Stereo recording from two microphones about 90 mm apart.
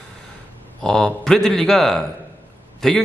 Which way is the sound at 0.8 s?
10° left (ahead or behind).